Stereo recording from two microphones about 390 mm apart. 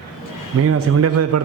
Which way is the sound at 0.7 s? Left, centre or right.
Right.